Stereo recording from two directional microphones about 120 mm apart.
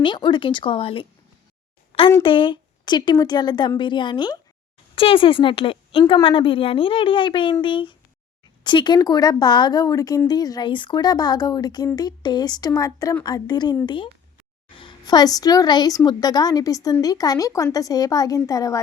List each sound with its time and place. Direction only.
0.0 s a woman's voice: 40° left (ahead or behind)
1.9 s a sound: 50° left (ahead or behind)
2.2 s a woman's voice: 45° left (ahead or behind); by 18.8 s 30° left (ahead or behind)